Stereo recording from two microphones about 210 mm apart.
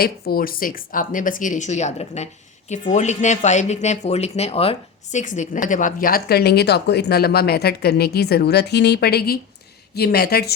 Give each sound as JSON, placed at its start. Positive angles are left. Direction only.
{"t": 0.0, "sound": "speech", "side_deg": 45}